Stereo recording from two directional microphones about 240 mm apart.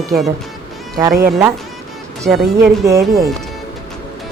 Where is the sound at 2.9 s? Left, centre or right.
Centre.